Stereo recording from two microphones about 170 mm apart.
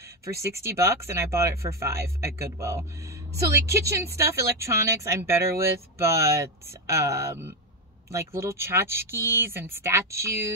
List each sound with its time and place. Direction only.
0.2 s speech: 20° right (ahead or behind)